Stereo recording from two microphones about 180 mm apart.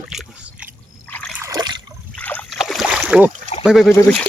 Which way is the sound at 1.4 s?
20° right (ahead or behind).